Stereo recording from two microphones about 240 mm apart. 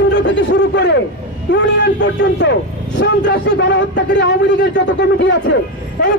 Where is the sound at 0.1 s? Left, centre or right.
Left.